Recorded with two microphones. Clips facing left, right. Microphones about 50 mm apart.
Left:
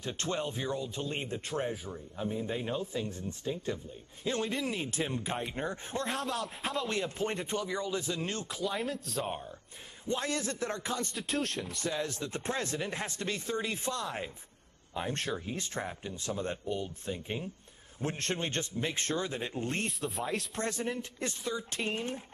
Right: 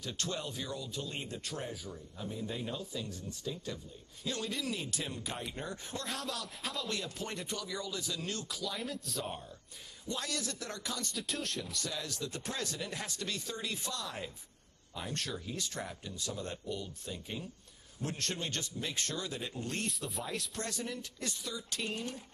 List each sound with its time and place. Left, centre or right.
0.0 s speech: left
6.0 s a man's voice: centre
6.9 s speech: left
8.7 s a man's voice: centre
10.0 s speech: left
11.1 s a man's voice: centre
11.7 s speech: left
20.0 s a man's voice: centre
20.5 s speech: left